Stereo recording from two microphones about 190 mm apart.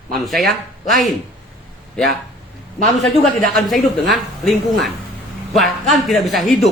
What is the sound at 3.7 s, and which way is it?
Speech, centre (ahead or behind).